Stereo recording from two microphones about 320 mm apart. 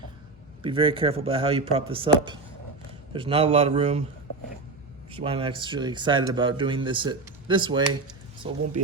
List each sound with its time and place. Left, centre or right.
0.6 s a man's voice: centre
5.1 s speech: centre